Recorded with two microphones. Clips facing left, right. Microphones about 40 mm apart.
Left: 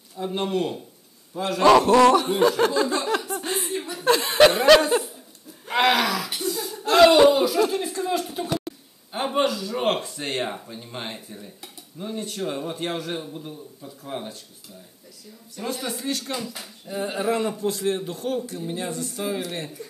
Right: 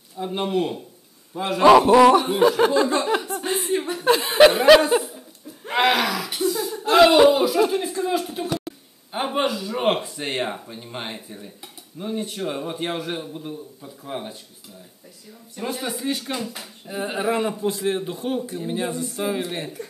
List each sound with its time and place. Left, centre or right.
0.2 s speech: centre
2.9 s a sound: centre
3.3 s chuckle: centre
3.7 s chuckle: right
4.0 s speech: centre
15.6 s speech: centre